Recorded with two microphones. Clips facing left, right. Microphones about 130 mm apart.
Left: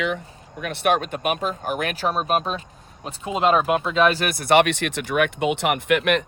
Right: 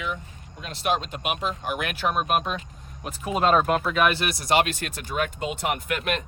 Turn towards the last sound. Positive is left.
turn(degrees=70)  # may be behind; listen again after turning